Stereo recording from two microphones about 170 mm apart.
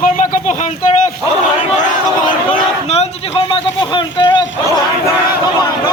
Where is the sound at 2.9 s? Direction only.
35° left (ahead or behind).